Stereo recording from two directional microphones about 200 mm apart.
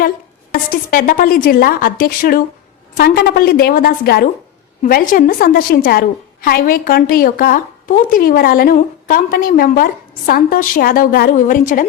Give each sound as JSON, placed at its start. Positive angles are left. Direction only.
{"t": 0.9, "sound": "a woman's voice", "side_deg": 45}